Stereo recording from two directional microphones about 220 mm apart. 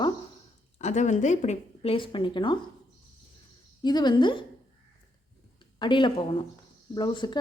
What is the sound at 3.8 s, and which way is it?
Speech, 20° left (ahead or behind).